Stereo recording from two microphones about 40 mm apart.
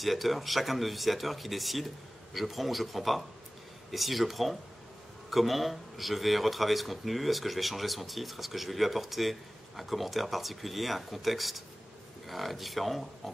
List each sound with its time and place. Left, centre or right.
0.0 s speech: centre